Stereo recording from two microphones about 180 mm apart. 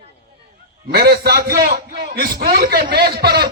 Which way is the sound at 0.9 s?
60° right (ahead or behind).